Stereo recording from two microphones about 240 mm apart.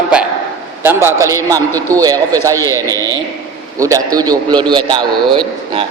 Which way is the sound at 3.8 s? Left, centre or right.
Centre.